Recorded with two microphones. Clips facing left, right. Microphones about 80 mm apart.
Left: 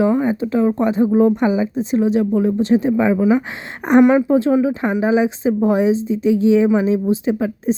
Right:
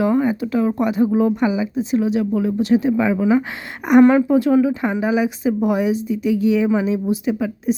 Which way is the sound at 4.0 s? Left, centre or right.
Centre.